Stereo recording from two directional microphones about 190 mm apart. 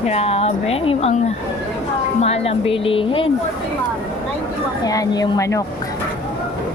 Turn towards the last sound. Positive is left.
turn(degrees=15)  # may be behind; listen again after turning